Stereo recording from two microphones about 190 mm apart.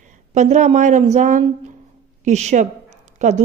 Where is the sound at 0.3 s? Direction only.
40° right (ahead or behind).